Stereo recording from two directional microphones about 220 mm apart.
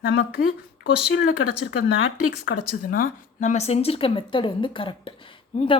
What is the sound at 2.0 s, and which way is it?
Speech, 75° left (ahead or behind).